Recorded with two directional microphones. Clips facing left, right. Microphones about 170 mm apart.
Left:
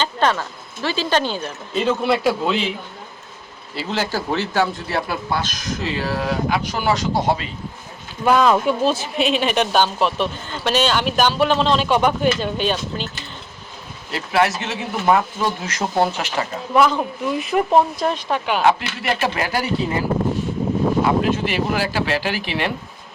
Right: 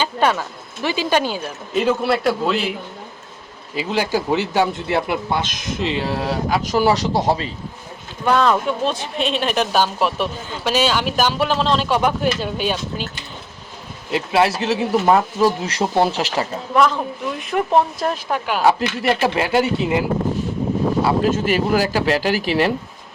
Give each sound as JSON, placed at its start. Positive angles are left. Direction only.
{"t": 0.0, "sound": "speech", "side_deg": -10}
{"t": 3.8, "sound": "speech", "side_deg": -10}
{"t": 8.2, "sound": "speech", "side_deg": 5}
{"t": 14.1, "sound": "speech", "side_deg": -25}
{"t": 16.7, "sound": "speech", "side_deg": 5}
{"t": 18.6, "sound": "speech", "side_deg": -30}
{"t": 21.0, "sound": "speech", "side_deg": -45}